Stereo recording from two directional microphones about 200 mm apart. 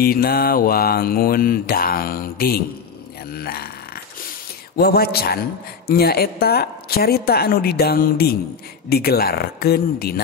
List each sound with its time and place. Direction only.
0.0 s mantra: 50° left (ahead or behind)
3.3 s a sound: 50° left (ahead or behind)
4.7 s mantra: 50° left (ahead or behind)